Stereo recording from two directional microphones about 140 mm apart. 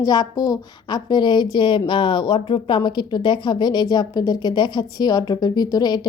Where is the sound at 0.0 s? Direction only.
30° left (ahead or behind).